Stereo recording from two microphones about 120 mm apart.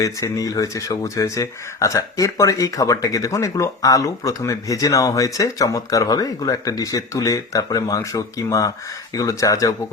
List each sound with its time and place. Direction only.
0.0 s speech: 30° left (ahead or behind)